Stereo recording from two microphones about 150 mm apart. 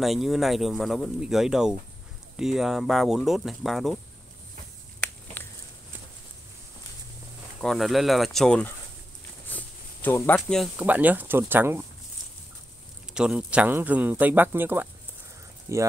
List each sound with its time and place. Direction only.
0.0 s speech: centre (ahead or behind)
5.0 s a sound: 10° left (ahead or behind)
7.6 s speech: centre (ahead or behind)
9.5 s a sound: 10° left (ahead or behind)
10.6 s speech: 10° right (ahead or behind)
13.1 s speech: 5° right (ahead or behind); by 15.8 s 20° right (ahead or behind)